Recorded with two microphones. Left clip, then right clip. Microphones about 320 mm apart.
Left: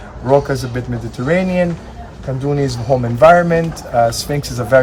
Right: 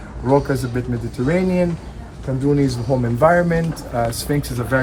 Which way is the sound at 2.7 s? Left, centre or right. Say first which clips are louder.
Left 4 dB; left.